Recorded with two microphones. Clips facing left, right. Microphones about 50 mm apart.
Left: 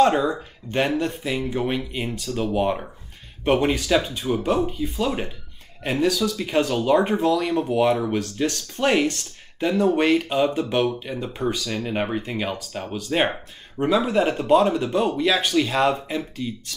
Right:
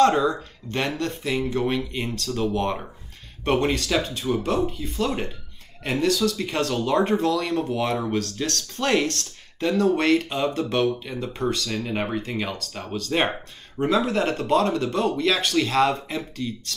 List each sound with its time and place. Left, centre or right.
0.0 s speech: centre